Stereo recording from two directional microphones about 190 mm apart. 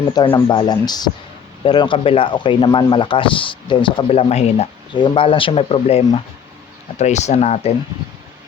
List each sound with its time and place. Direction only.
0.1 s speech: 20° left (ahead or behind)
7.0 s speech: 35° left (ahead or behind)